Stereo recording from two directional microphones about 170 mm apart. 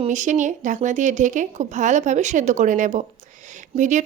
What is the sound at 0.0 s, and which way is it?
Speech, 45° right (ahead or behind).